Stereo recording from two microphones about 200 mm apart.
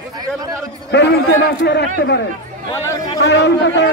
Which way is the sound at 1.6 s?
55° left (ahead or behind).